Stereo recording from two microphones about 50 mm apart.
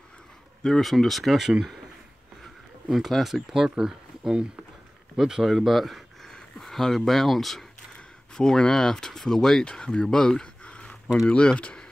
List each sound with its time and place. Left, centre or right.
0.7 s speech: centre
2.9 s speech: centre
3.5 s speech: centre
10.6 s a sound: left
11.2 s speech: left